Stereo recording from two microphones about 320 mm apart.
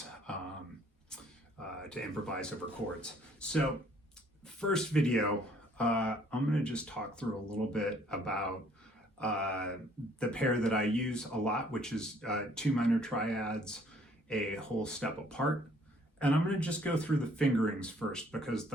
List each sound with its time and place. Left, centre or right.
1.6 s speech: centre